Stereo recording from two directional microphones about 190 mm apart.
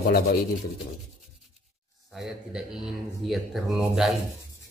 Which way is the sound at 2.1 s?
5° right (ahead or behind).